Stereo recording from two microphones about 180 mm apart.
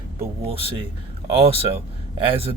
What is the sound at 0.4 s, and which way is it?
Speech, 30° right (ahead or behind).